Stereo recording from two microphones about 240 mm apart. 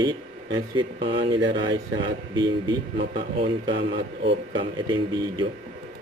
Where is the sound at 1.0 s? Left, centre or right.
Right.